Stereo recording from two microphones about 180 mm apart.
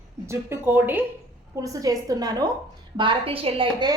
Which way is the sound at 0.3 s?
15° right (ahead or behind).